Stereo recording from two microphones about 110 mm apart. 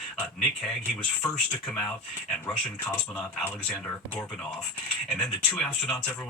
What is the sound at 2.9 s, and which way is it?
Speech, 10° left (ahead or behind).